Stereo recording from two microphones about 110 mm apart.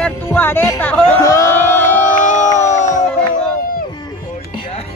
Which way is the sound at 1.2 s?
30° left (ahead or behind).